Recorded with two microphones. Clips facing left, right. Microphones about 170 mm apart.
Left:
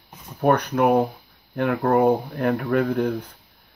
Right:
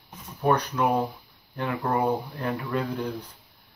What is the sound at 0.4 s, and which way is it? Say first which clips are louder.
Speech: left 5 dB; 60° left (ahead or behind).